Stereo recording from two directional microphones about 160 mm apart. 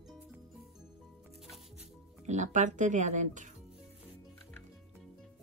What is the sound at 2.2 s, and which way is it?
Speech, 50° right (ahead or behind).